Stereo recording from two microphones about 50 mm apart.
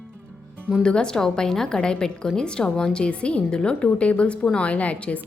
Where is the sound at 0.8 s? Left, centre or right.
Centre.